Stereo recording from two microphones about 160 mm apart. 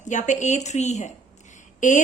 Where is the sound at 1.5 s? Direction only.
50° left (ahead or behind).